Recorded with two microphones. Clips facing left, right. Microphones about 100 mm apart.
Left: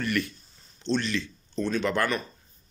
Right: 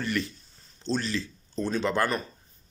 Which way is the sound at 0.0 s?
25° right (ahead or behind).